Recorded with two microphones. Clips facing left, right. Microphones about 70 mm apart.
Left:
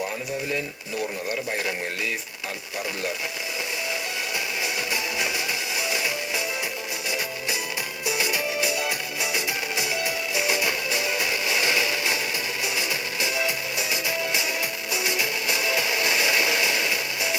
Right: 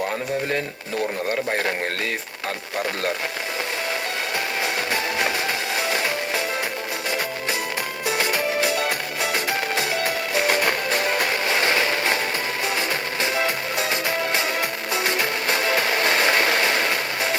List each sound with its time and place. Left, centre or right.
1.3 s speech: right
4.6 s music: right
8.0 s music: right